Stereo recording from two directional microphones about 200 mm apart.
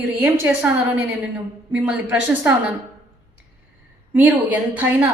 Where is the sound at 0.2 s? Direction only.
10° right (ahead or behind).